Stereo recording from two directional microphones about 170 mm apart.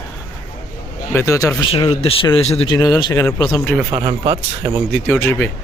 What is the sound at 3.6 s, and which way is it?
Speech, 5° left (ahead or behind).